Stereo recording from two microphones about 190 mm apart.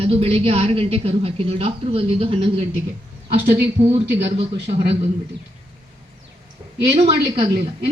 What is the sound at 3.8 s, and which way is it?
Speech, 35° right (ahead or behind).